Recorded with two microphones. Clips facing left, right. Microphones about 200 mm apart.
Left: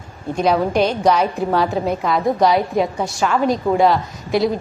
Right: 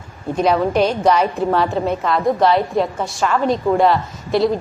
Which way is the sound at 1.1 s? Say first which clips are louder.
Right 1 dB; 5° left (ahead or behind).